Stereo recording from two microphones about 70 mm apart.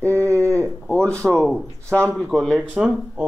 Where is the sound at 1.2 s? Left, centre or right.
Centre.